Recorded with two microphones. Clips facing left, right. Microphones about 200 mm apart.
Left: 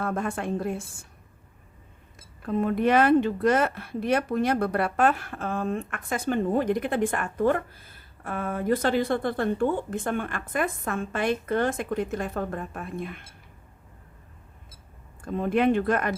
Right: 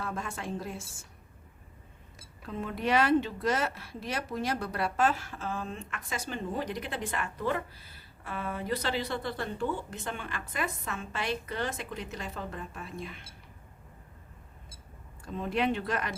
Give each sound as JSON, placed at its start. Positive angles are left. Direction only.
{"t": 0.0, "sound": "a woman's voice", "side_deg": 55}
{"t": 2.1, "sound": "speech", "side_deg": 55}
{"t": 15.2, "sound": "speech", "side_deg": 55}